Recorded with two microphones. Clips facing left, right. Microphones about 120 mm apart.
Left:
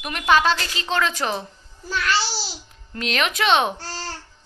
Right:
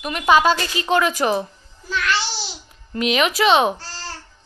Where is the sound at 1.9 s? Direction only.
35° left (ahead or behind).